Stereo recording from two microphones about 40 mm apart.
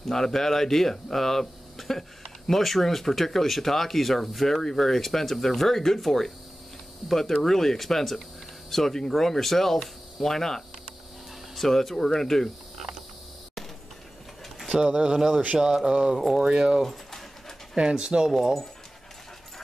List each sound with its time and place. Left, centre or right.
0.0 s speech: centre
14.9 s speech: right; by 16.4 s centre
16.8 s a sound: centre
17.7 s speech: right